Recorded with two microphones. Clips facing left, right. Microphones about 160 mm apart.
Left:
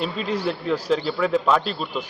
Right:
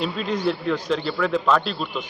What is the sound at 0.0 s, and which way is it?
A man's voice, 5° left (ahead or behind).